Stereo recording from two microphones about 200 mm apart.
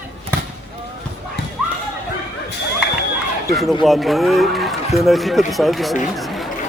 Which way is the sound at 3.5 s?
Centre (ahead or behind).